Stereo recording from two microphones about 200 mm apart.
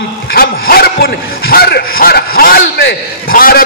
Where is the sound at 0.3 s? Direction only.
50° left (ahead or behind).